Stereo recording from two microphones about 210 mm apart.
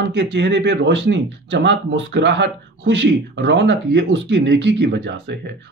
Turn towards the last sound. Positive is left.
turn(degrees=-55)  # may be behind; listen again after turning